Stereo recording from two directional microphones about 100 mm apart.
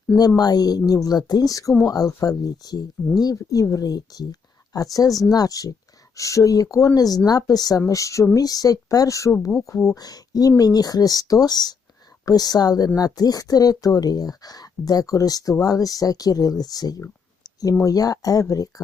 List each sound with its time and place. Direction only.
0.2 s speech: 40° left (ahead or behind)